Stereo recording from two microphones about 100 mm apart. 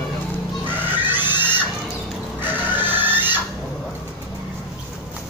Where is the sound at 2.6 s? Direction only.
20° right (ahead or behind).